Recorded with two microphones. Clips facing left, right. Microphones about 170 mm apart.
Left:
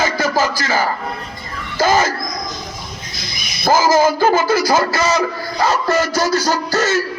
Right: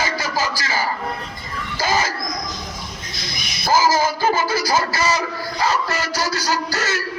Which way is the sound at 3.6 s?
50° left (ahead or behind).